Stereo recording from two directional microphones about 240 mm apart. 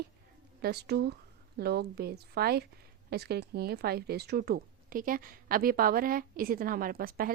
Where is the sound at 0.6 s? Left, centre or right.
Right.